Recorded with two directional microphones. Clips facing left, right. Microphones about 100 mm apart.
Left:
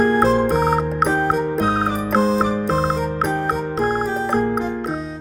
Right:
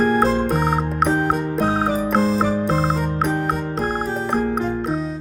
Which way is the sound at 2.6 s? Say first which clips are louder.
Left 1 dB; centre (ahead or behind).